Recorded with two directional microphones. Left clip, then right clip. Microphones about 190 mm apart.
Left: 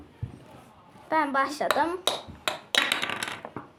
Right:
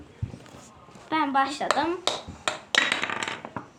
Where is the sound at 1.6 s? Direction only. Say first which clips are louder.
Even; centre (ahead or behind).